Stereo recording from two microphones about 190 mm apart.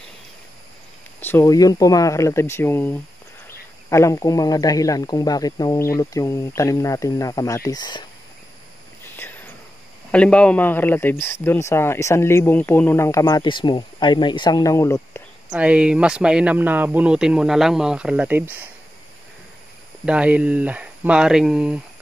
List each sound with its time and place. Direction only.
1.2 s speech: 10° left (ahead or behind)
10.1 s speech: 5° left (ahead or behind)
15.5 s speech: 5° right (ahead or behind)
20.1 s speech: 5° right (ahead or behind)